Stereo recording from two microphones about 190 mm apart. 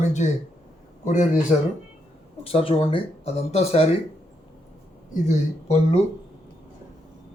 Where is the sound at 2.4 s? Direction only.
30° left (ahead or behind).